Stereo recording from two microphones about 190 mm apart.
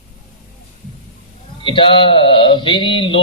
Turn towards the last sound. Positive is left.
turn(degrees=25)  # may be behind; listen again after turning